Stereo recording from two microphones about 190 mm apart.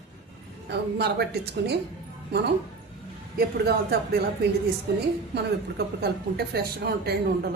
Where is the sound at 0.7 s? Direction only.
60° right (ahead or behind).